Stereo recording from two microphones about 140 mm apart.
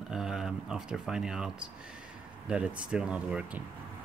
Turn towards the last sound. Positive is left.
turn(degrees=-10)  # may be behind; listen again after turning